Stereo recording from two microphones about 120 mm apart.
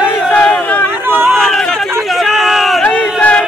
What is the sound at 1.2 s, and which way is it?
Chatter, 5° left (ahead or behind).